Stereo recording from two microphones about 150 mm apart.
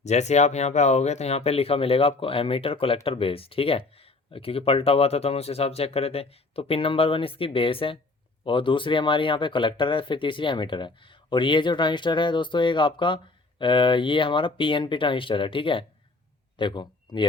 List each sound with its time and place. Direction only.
0.0 s speech: 50° left (ahead or behind); by 17.2 s 30° left (ahead or behind)